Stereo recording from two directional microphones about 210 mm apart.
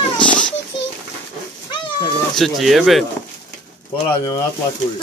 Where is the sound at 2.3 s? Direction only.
Centre (ahead or behind).